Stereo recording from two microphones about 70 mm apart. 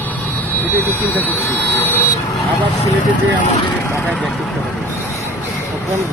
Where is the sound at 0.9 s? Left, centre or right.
Left.